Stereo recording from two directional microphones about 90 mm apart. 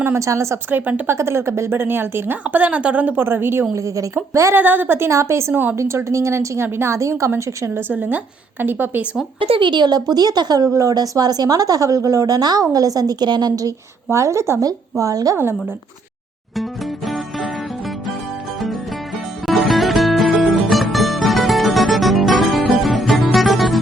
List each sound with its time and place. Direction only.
0.0 s a woman's voice: 30° right (ahead or behind)
0.7 s a woman's voice: 20° right (ahead or behind)
1.1 s a woman's voice: 30° right (ahead or behind)
9.4 s a woman's voice: 75° right (ahead or behind); by 15.4 s 40° right (ahead or behind)
19.5 s music: centre (ahead or behind)